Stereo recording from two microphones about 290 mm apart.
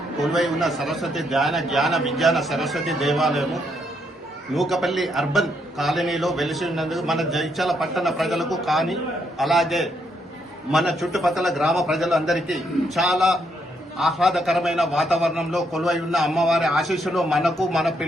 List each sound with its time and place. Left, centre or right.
0.3 s a man's voice: centre